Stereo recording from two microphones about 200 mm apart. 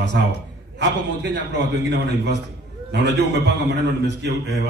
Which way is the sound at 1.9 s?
60° right (ahead or behind).